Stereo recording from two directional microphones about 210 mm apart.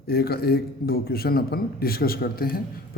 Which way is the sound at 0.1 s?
45° left (ahead or behind).